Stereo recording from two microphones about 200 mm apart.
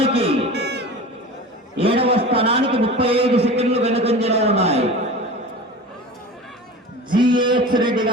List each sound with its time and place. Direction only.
0.0 s music: 30° right (ahead or behind)
0.5 s music: 55° right (ahead or behind)
1.8 s a man's voice: 30° right (ahead or behind)
7.1 s a sound: 25° right (ahead or behind)